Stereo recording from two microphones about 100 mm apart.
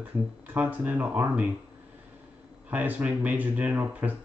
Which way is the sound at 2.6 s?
15° right (ahead or behind).